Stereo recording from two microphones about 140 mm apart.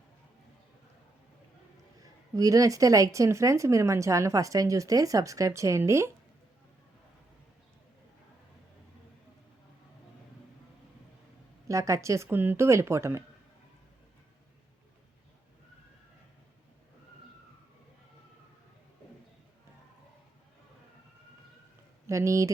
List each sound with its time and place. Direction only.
2.0 s speech: 25° right (ahead or behind)
11.7 s speech: 20° right (ahead or behind)
22.0 s speech: 20° right (ahead or behind)